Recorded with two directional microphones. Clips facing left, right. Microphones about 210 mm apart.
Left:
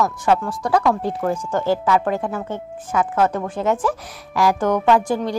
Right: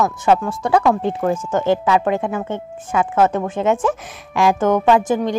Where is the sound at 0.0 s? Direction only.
25° right (ahead or behind).